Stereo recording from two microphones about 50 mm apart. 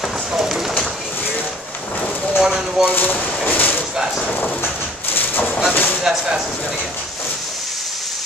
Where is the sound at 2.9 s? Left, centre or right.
Left.